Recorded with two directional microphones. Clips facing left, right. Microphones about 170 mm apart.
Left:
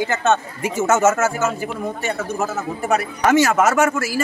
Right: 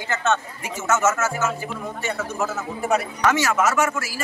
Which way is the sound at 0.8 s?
30° left (ahead or behind).